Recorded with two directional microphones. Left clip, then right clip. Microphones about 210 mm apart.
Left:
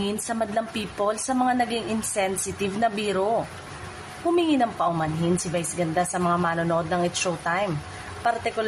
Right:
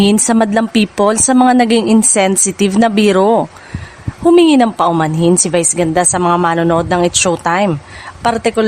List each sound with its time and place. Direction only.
0.0 s a woman's voice: 55° right (ahead or behind)